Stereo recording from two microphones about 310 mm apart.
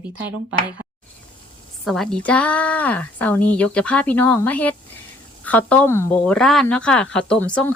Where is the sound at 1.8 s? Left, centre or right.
Centre.